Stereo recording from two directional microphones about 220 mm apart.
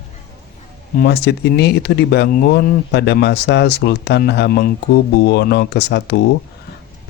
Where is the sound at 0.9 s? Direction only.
45° left (ahead or behind).